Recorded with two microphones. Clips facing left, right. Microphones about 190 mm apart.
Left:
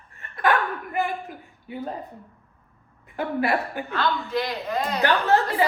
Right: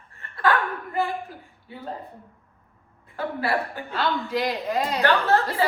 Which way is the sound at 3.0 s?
20° left (ahead or behind).